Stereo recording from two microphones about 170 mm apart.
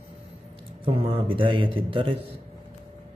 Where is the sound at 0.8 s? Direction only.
30° right (ahead or behind).